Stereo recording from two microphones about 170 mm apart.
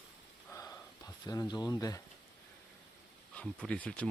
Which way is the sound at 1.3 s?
20° left (ahead or behind).